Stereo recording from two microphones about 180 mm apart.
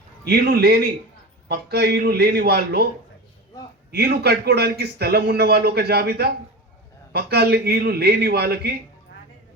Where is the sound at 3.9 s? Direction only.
65° right (ahead or behind).